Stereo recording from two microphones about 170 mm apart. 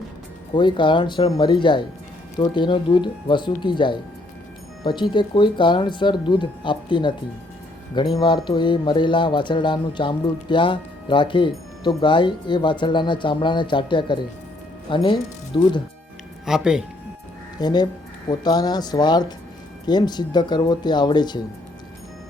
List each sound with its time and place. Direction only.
0.5 s speech: 25° left (ahead or behind)
5.1 s speech: 25° left (ahead or behind)
16.5 s speech: 5° right (ahead or behind)
17.6 s speech: 25° left (ahead or behind)